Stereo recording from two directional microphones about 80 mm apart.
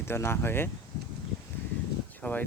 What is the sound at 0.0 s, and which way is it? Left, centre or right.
Speech, left.